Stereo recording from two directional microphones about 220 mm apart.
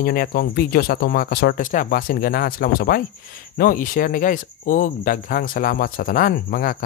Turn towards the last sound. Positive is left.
turn(degrees=40)  # may be behind; listen again after turning